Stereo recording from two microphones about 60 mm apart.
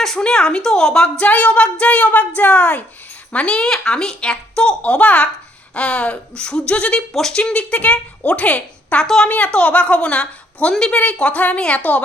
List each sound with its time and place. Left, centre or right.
0.2 s a woman's voice: centre
1.2 s a woman's voice: left
7.1 s speech: centre
7.3 s a woman's voice: centre